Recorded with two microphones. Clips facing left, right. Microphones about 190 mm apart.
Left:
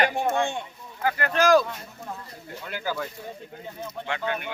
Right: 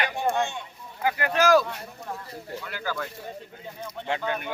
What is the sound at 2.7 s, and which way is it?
Speech, 20° left (ahead or behind).